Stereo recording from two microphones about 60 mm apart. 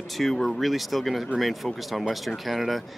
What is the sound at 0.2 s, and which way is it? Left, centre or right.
Speech, centre.